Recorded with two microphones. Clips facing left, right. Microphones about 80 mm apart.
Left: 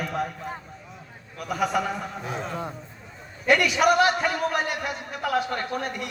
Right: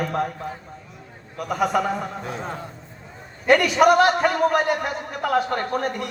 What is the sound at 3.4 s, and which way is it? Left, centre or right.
A man's voice, right.